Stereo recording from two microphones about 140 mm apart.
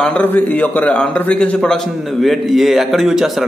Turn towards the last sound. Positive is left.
turn(degrees=-5)  # may be behind; listen again after turning